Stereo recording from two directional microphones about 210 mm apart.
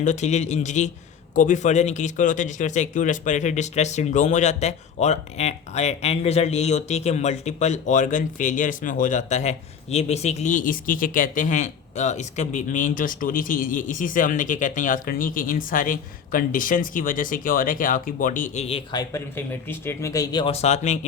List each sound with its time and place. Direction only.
0.0 s speech: 35° left (ahead or behind)